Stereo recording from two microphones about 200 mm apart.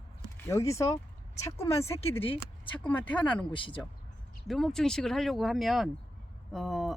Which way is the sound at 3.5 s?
25° left (ahead or behind).